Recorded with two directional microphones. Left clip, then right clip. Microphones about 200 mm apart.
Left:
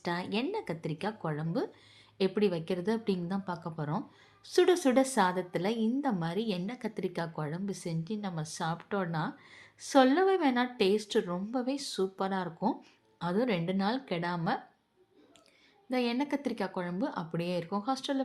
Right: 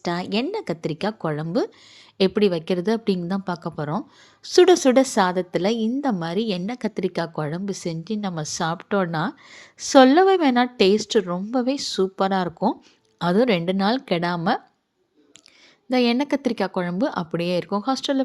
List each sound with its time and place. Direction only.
0.0 s a woman's voice: 35° right (ahead or behind)
15.9 s a woman's voice: 40° right (ahead or behind)